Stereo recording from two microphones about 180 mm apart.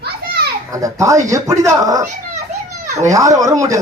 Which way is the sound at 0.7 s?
20° right (ahead or behind).